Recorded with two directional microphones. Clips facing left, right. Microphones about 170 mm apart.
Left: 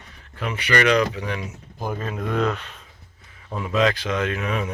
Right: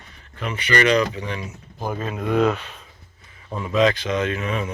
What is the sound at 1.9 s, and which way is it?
Speech, 5° right (ahead or behind).